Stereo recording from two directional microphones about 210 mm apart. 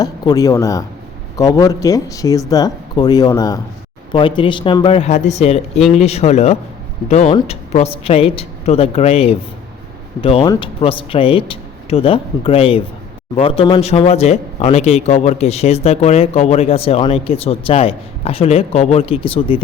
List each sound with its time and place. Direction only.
0.0 s speech: 15° left (ahead or behind)
10.4 s speech: 15° left (ahead or behind)
10.8 s speech: 25° left (ahead or behind)